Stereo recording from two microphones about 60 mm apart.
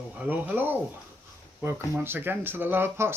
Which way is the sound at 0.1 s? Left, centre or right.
Right.